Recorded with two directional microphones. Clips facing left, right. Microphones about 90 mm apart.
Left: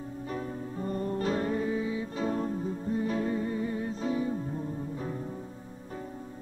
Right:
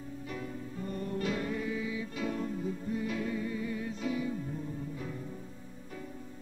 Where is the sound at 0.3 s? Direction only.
35° left (ahead or behind).